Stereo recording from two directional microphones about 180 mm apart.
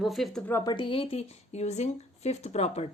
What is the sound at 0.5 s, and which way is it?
A woman's voice, 25° left (ahead or behind).